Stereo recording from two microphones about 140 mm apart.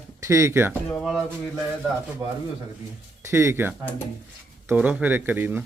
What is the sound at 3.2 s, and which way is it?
Speech, 20° right (ahead or behind).